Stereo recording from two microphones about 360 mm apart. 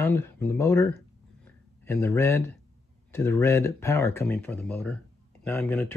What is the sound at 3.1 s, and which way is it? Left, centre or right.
Speech, centre.